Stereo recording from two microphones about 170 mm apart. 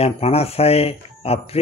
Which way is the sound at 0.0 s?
35° left (ahead or behind).